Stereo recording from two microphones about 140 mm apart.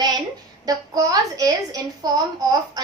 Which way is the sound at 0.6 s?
25° right (ahead or behind).